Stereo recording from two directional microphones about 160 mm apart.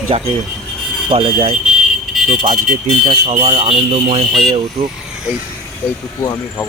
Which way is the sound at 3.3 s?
35° right (ahead or behind).